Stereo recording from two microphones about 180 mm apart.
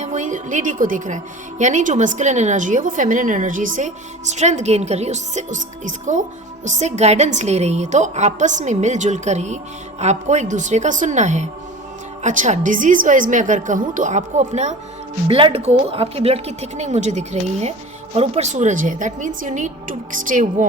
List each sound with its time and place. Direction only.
0.0 s a woman's voice: 40° right (ahead or behind)